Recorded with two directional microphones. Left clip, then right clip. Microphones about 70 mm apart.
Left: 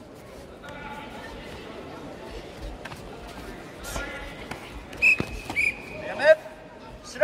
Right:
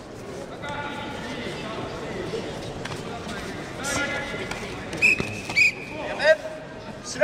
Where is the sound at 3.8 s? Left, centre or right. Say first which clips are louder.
Right 8 dB; right.